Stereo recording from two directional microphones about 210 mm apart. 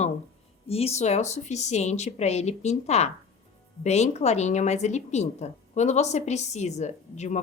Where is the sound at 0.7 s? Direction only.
30° left (ahead or behind).